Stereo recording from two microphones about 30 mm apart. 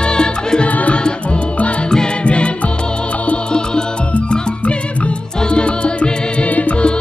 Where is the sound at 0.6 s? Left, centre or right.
Left.